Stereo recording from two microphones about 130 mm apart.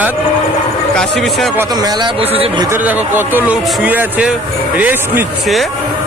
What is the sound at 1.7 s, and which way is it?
Speech, 30° right (ahead or behind).